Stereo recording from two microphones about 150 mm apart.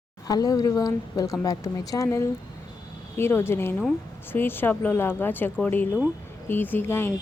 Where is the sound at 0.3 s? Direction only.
25° left (ahead or behind).